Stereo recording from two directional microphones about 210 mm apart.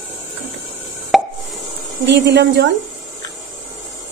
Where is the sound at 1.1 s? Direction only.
Centre (ahead or behind).